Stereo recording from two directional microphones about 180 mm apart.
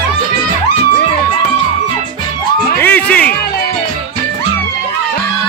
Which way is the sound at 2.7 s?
10° left (ahead or behind).